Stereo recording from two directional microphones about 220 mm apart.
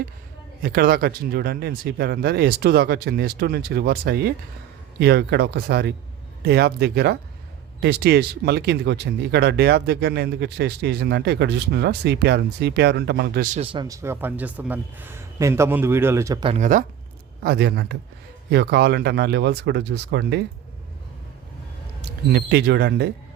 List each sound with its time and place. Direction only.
0.6 s speech: 40° right (ahead or behind)
13.6 s speech: 25° right (ahead or behind)
17.4 s speech: 45° right (ahead or behind)
22.3 s speech: 50° right (ahead or behind)